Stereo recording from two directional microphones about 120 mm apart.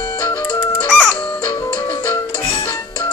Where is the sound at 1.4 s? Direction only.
35° left (ahead or behind).